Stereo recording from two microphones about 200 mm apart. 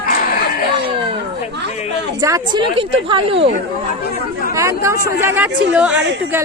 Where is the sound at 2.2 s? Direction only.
20° right (ahead or behind).